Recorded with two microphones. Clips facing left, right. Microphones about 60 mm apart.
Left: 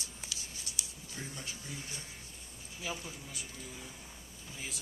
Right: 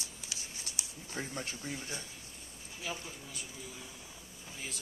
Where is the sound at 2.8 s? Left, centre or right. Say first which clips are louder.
Even; centre.